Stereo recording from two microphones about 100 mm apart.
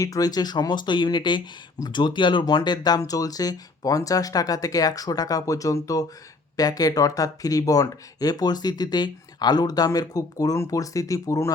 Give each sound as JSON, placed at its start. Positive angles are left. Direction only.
{"t": 0.0, "sound": "speech", "side_deg": 40}